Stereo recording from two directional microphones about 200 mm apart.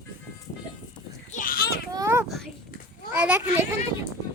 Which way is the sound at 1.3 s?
40° left (ahead or behind).